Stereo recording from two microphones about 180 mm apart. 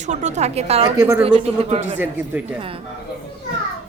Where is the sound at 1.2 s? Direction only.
35° right (ahead or behind).